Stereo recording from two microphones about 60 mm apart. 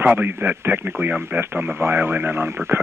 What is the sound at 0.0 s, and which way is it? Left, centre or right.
Speech, right.